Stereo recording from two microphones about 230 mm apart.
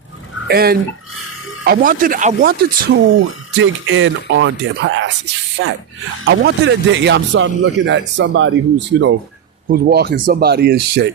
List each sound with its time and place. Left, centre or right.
0.4 s speech: right
3.2 s a man's voice: right
9.6 s a man's voice: right